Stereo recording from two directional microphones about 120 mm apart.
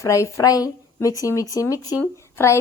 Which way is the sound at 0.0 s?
25° left (ahead or behind).